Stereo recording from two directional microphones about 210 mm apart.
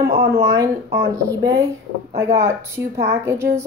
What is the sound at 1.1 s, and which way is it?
A woman's voice, 15° right (ahead or behind).